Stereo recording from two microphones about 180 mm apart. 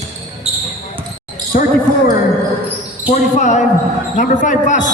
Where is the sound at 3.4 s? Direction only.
40° left (ahead or behind).